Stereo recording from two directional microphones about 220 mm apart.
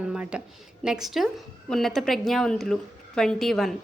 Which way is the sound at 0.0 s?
5° right (ahead or behind).